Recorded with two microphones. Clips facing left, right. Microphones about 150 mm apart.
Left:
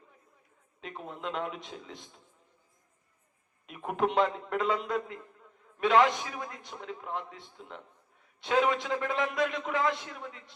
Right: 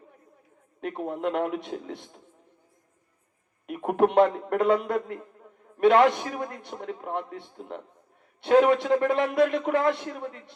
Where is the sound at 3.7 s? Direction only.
60° right (ahead or behind).